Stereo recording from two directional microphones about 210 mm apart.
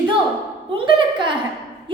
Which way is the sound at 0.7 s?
25° right (ahead or behind).